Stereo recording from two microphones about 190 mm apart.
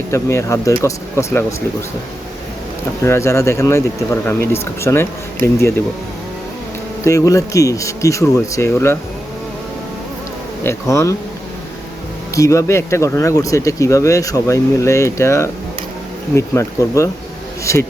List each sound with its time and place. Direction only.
0.1 s speech: 15° left (ahead or behind)
3.0 s speech: 15° left (ahead or behind)
7.0 s speech: 15° left (ahead or behind)
10.6 s speech: 15° left (ahead or behind)
12.3 s speech: 15° left (ahead or behind)